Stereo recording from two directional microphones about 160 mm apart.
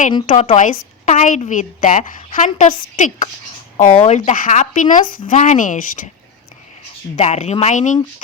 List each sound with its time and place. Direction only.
0.1 s a woman's voice: 25° left (ahead or behind)
0.6 s a woman's voice: 50° left (ahead or behind)
7.2 s a woman's voice: 45° left (ahead or behind)